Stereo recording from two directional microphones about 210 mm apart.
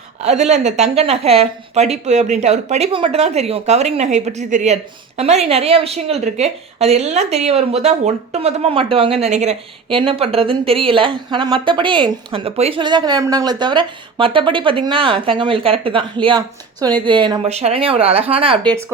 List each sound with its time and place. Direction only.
0.2 s speech: 30° right (ahead or behind)